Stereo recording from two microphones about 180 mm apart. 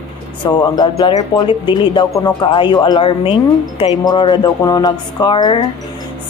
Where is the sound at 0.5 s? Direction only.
25° left (ahead or behind).